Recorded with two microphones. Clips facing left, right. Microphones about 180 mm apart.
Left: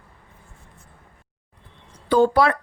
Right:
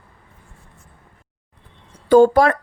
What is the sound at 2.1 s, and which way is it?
Speech, 45° right (ahead or behind).